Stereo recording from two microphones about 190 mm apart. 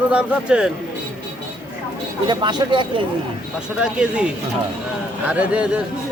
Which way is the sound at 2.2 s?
25° right (ahead or behind).